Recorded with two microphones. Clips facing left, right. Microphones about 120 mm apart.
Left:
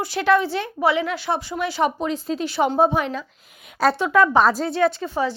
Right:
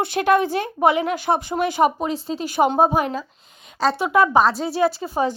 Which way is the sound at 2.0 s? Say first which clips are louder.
Left 1 dB; 30° right (ahead or behind).